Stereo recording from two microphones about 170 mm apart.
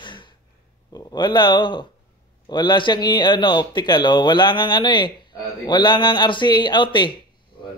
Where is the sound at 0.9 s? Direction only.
25° left (ahead or behind).